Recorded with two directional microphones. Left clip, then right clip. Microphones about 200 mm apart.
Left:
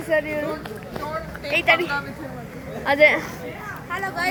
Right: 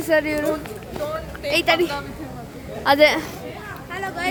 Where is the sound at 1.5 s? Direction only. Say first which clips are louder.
Even; 25° right (ahead or behind).